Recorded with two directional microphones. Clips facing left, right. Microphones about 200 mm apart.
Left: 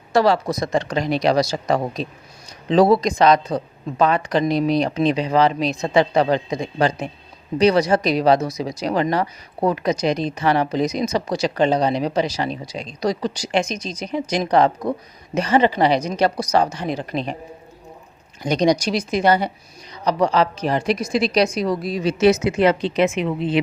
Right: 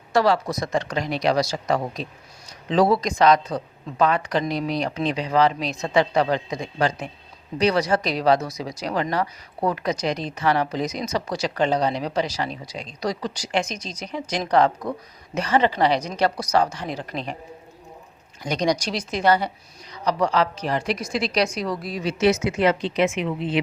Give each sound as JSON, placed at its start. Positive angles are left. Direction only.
{"t": 0.1, "sound": "a woman's voice", "side_deg": 30}
{"t": 18.4, "sound": "a woman's voice", "side_deg": 25}
{"t": 18.9, "sound": "a woman's voice", "side_deg": 15}
{"t": 22.0, "sound": "a woman's voice", "side_deg": 35}